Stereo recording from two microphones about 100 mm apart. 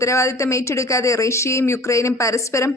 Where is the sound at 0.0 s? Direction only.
30° left (ahead or behind).